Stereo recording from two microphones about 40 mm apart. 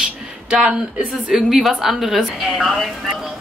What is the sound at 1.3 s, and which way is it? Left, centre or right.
A woman's voice, centre.